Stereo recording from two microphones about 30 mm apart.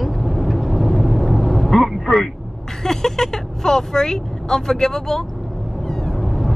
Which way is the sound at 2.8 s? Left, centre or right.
Centre.